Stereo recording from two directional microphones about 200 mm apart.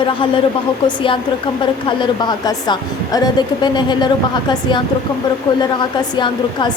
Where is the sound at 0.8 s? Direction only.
25° left (ahead or behind).